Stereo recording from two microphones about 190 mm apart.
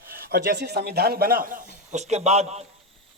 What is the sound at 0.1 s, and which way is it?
A man's voice, 55° right (ahead or behind).